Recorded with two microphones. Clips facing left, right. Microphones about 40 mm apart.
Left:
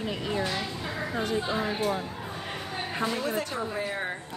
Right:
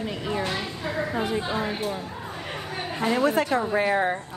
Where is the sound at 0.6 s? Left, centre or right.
Centre.